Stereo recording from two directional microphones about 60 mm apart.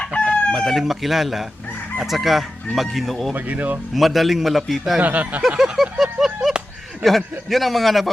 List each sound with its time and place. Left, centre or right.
0.0 s chicken: centre
0.5 s chicken: centre
3.3 s speech: right
3.9 s chicken: centre
4.9 s speech: right
5.5 s a sound: centre
7.0 s chicken: centre